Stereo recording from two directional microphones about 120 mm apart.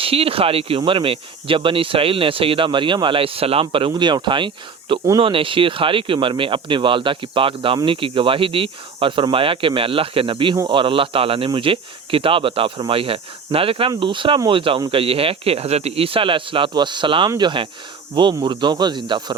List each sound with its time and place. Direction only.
0.0 s speech: 50° right (ahead or behind)